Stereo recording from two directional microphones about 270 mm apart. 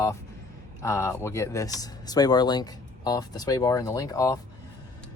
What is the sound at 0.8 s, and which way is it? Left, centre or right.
Speech, centre.